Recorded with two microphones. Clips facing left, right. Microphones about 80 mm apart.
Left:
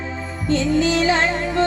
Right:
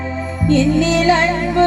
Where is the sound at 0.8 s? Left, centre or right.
Centre.